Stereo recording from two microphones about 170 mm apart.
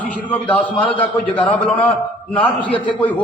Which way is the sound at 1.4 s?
30° left (ahead or behind).